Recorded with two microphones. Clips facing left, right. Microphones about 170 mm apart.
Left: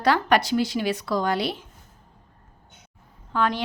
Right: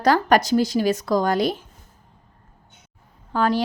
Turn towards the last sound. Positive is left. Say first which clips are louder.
# right 4 dB
turn(degrees=-40)  # may be behind; listen again after turning